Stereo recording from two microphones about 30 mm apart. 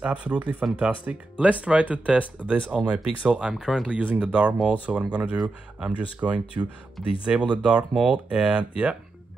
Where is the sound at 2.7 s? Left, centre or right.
Right.